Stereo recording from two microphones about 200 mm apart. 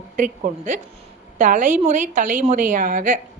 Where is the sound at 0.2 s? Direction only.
40° right (ahead or behind).